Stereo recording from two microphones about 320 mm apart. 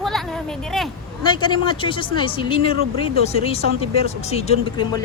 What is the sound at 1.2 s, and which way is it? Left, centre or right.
Speech, centre.